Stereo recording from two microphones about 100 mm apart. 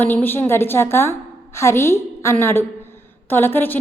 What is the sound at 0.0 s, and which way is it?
A woman's voice, 20° left (ahead or behind).